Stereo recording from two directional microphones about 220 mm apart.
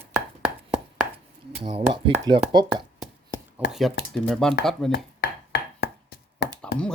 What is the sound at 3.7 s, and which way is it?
Speech, centre (ahead or behind).